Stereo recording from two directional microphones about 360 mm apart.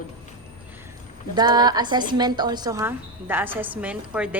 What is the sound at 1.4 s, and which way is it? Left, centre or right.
Speech, centre.